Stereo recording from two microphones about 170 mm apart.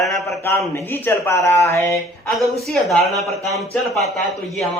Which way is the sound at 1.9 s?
Centre (ahead or behind).